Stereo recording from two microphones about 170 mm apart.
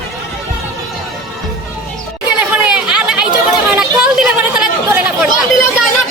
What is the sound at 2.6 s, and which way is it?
Chatter, 5° right (ahead or behind).